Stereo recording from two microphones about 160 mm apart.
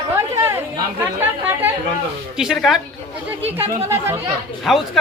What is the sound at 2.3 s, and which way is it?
Speech, centre (ahead or behind).